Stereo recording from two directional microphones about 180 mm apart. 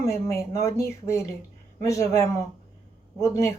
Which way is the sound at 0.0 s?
15° left (ahead or behind).